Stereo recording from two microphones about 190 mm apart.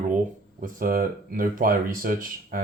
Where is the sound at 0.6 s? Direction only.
45° right (ahead or behind).